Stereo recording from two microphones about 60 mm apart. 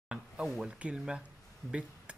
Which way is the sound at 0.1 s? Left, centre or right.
Centre.